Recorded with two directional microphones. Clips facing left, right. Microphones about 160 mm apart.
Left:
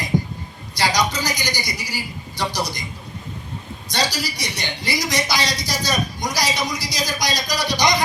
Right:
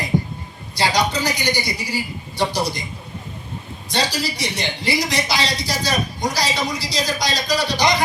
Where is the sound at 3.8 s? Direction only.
40° left (ahead or behind).